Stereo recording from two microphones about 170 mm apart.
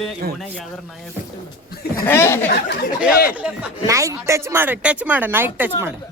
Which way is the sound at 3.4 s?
5° right (ahead or behind).